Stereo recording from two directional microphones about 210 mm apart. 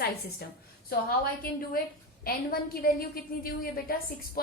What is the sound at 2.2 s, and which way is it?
A woman's voice, 45° left (ahead or behind).